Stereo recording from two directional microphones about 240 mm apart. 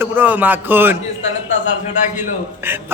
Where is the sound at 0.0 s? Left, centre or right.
Centre.